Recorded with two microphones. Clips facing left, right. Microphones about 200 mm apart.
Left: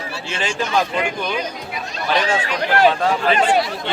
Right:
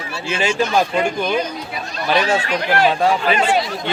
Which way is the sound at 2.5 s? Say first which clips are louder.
Left 3 dB; 40° left (ahead or behind).